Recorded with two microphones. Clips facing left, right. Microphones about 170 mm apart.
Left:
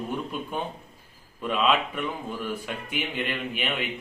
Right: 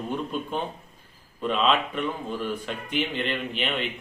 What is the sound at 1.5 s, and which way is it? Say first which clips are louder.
A man's voice: even; 10° left (ahead or behind).